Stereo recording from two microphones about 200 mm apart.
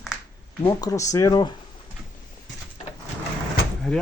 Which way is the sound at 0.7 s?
15° left (ahead or behind).